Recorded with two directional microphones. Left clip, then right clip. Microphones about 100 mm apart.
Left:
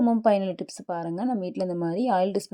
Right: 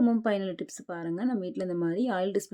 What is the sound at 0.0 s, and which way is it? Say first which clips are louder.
Speech: left 6 dB; 30° left (ahead or behind).